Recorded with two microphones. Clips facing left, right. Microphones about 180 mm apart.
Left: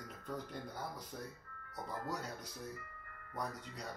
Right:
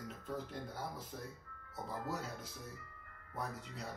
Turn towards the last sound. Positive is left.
turn(degrees=-5)  # may be behind; listen again after turning